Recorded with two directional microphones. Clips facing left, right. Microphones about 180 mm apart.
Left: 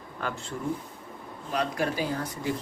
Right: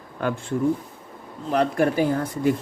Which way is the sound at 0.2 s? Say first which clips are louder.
Right 10 dB; 55° right (ahead or behind).